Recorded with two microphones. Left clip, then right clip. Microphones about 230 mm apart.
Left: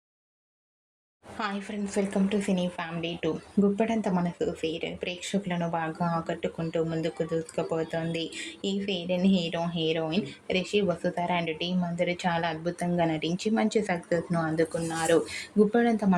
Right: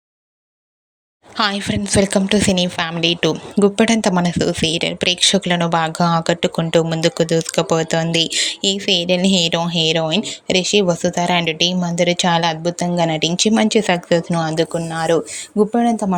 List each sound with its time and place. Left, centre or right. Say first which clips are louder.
1.4 s speech: right 14 dB; right